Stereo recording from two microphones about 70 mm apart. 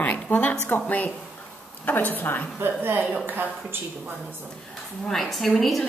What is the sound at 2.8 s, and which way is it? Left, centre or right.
Speech, right.